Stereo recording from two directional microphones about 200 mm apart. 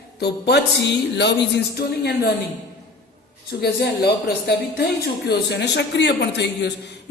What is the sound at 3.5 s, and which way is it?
Speech, 55° left (ahead or behind).